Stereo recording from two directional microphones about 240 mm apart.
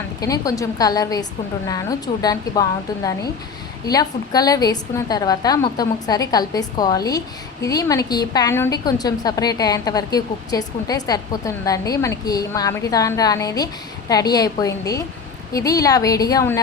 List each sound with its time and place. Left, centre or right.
0.2 s a woman's voice: centre